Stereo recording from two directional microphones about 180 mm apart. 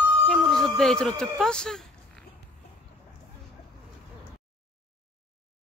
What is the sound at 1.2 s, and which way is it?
Speech, 5° left (ahead or behind).